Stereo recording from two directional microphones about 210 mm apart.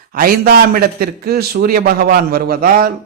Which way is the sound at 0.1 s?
45° right (ahead or behind).